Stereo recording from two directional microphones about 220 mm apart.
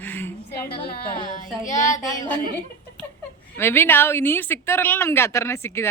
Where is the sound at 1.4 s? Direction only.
35° left (ahead or behind).